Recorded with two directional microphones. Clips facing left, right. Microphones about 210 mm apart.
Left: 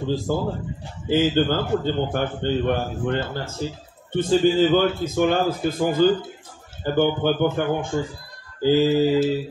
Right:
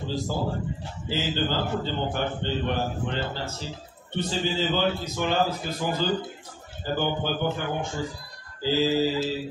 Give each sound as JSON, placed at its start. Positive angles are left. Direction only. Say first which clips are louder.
{"t": 0.3, "sound": "a man's voice", "louder": "left 4 dB", "side_deg": 55}